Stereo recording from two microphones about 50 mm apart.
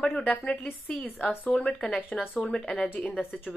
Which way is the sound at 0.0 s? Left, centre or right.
Left.